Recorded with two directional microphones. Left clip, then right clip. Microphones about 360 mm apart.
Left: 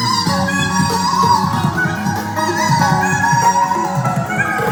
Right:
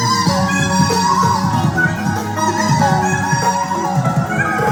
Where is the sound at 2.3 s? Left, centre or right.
Centre.